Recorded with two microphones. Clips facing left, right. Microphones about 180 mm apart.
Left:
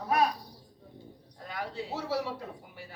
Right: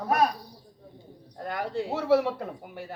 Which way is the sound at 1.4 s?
55° right (ahead or behind).